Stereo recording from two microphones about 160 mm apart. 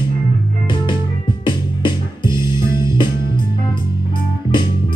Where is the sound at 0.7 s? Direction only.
30° left (ahead or behind).